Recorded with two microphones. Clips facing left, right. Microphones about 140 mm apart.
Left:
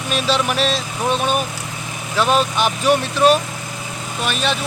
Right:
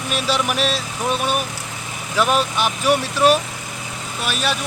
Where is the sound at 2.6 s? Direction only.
10° right (ahead or behind).